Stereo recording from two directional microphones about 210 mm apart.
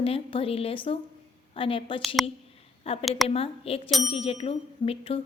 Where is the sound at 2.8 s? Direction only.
25° left (ahead or behind).